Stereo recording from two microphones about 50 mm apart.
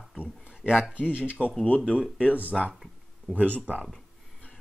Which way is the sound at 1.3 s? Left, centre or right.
Left.